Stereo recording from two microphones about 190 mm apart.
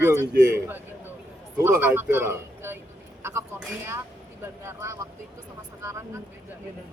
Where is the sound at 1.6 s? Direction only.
10° right (ahead or behind).